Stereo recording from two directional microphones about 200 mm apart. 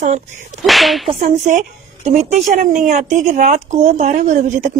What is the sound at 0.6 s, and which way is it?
Speech, centre (ahead or behind).